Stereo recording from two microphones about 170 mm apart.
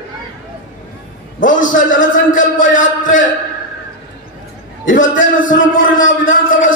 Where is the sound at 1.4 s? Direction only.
50° left (ahead or behind).